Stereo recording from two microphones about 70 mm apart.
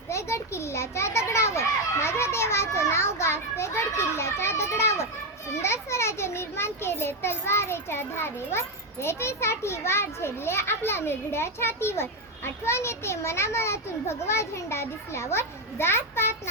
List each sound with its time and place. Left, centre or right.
0.1 s a child's voice: left